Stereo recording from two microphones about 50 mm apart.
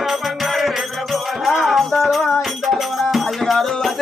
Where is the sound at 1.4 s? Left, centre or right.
Centre.